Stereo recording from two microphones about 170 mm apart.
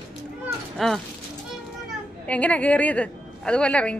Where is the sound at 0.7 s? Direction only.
Centre (ahead or behind).